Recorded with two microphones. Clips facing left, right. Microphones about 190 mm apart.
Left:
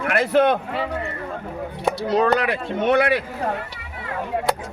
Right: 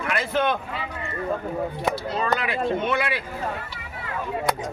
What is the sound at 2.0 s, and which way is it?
Speech, 70° left (ahead or behind).